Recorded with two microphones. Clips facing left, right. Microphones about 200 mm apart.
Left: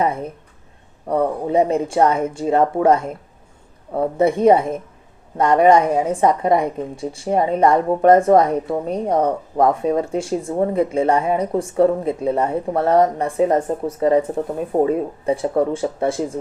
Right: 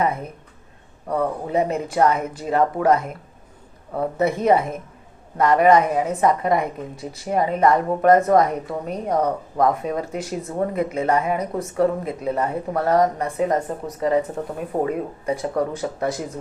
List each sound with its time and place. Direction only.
0.0 s a woman's voice: 30° left (ahead or behind)